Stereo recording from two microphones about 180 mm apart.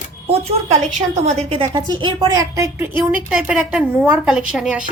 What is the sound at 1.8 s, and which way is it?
A woman's voice, 25° right (ahead or behind).